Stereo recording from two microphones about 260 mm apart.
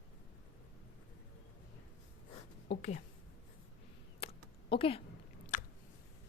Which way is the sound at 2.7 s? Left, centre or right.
Left.